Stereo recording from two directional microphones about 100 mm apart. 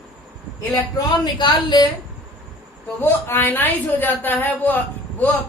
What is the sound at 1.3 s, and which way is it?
Speech, 45° left (ahead or behind).